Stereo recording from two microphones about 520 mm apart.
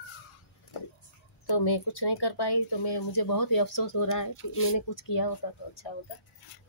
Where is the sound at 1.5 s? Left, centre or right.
Left.